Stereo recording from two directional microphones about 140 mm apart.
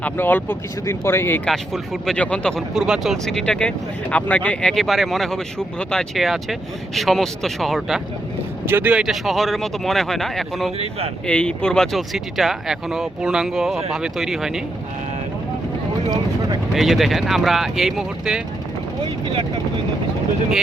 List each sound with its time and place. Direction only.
0.0 s speech: 10° left (ahead or behind)
1.5 s speech: centre (ahead or behind)
8.6 s speech: 15° right (ahead or behind)
16.7 s speech: centre (ahead or behind)
19.3 s speech: 35° right (ahead or behind)